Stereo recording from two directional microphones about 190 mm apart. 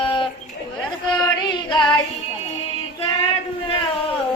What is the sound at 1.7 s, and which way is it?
Music, 25° left (ahead or behind).